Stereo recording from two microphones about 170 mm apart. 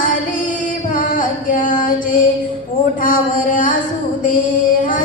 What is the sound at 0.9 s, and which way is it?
Music, 50° left (ahead or behind).